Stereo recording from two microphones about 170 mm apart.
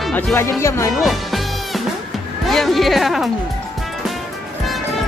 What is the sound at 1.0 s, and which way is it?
Music, centre (ahead or behind).